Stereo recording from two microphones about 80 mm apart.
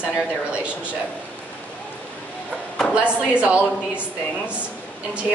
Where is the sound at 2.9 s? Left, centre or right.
Centre.